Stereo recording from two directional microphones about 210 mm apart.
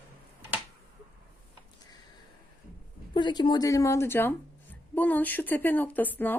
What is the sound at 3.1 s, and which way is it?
Speech, 20° left (ahead or behind).